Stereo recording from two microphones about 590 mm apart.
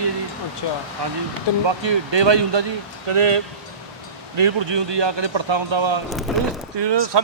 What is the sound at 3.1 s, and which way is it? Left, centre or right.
Speech, right.